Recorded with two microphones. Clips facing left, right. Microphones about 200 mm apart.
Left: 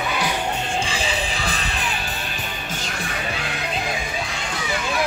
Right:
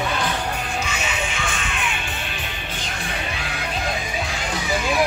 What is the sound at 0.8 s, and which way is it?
Music, 30° left (ahead or behind).